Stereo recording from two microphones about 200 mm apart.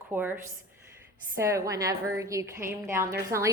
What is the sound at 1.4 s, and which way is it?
A woman's voice, 15° right (ahead or behind).